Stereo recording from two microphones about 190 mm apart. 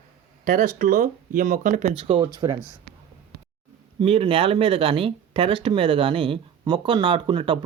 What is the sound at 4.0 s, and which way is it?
Speech, 30° right (ahead or behind).